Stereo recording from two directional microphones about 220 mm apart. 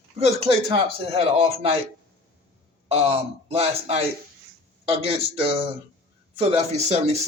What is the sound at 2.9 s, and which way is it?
A man's voice, 25° right (ahead or behind).